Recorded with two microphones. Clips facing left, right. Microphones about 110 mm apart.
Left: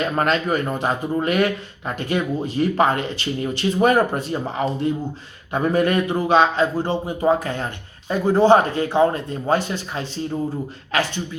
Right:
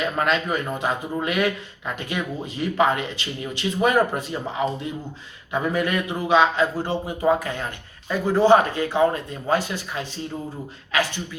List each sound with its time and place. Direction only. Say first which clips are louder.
0.0 s speech: left 2 dB; 35° left (ahead or behind)
6.7 s speech: left 3 dB; 25° left (ahead or behind)